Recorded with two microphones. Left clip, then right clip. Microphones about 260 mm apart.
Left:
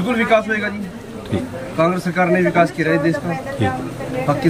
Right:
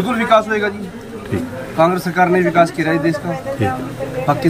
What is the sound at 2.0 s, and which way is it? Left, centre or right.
Speech, centre.